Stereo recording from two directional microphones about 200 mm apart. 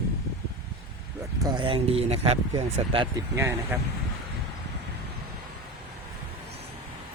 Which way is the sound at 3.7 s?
10° right (ahead or behind).